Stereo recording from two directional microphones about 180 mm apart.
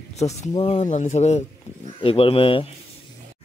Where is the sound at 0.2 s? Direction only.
40° left (ahead or behind).